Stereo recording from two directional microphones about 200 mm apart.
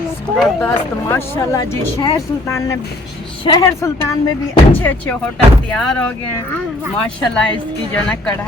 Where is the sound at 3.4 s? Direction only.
20° left (ahead or behind).